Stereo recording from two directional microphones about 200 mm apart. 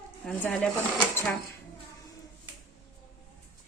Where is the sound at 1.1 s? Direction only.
10° left (ahead or behind).